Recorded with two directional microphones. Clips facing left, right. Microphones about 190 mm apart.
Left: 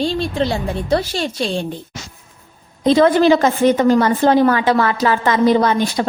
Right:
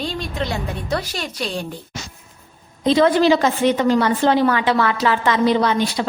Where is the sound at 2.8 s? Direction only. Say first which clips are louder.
Left 3 dB; 50° left (ahead or behind).